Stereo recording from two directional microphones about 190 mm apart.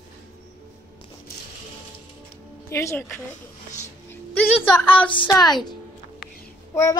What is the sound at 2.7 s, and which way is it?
Speech, 15° left (ahead or behind).